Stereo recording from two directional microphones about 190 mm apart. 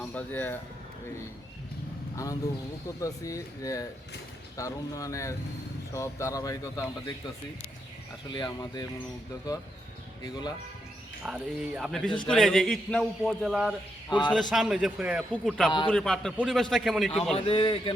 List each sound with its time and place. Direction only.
0.1 s speech: 10° left (ahead or behind)
2.1 s speech: 15° left (ahead or behind)
8.3 s speech: 25° left (ahead or behind)
11.2 s a man's voice: 5° right (ahead or behind)
17.3 s speech: 30° left (ahead or behind)